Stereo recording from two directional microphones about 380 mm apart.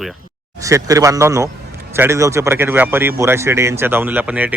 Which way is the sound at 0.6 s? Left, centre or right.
Centre.